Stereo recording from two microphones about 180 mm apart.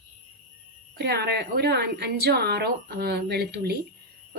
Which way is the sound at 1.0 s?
65° right (ahead or behind).